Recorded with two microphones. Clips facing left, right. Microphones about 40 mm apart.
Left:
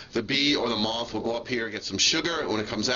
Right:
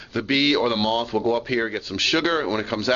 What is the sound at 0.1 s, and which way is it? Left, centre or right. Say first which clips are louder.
Speech: right 4 dB; right.